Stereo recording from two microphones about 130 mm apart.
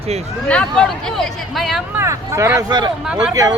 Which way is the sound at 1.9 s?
20° right (ahead or behind).